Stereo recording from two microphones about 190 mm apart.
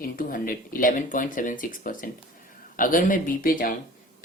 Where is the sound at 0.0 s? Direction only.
50° left (ahead or behind).